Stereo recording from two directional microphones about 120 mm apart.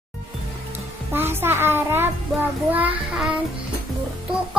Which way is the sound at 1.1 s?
20° right (ahead or behind).